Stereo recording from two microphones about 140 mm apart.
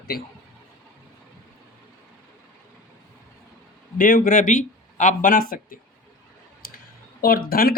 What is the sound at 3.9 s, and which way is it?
Speech, 75° left (ahead or behind).